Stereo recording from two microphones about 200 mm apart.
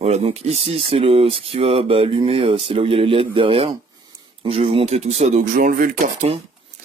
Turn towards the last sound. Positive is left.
turn(degrees=-45)  # may be behind; listen again after turning